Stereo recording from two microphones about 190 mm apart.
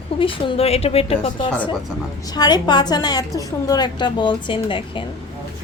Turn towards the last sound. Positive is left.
turn(degrees=25)  # may be behind; listen again after turning